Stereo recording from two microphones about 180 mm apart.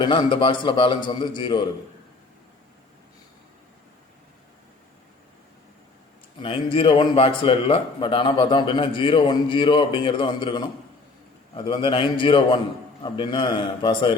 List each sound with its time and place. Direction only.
0.0 s a man's voice: 25° left (ahead or behind)
6.4 s a man's voice: 30° left (ahead or behind)